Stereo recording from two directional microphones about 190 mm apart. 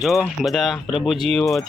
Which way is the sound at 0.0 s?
Centre (ahead or behind).